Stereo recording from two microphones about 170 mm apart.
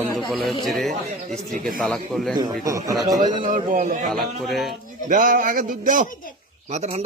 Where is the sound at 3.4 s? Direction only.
50° right (ahead or behind).